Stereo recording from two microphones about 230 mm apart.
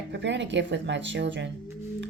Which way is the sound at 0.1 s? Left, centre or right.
Right.